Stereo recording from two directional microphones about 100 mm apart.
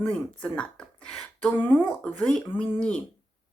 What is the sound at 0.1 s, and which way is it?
A woman's voice, 10° left (ahead or behind).